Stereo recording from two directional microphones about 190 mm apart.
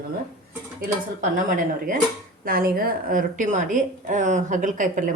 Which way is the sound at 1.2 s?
45° right (ahead or behind).